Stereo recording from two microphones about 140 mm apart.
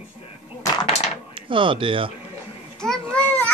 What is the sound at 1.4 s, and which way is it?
Speech, 35° right (ahead or behind).